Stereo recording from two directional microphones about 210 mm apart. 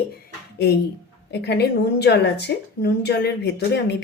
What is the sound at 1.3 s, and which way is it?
A woman's voice, 50° left (ahead or behind).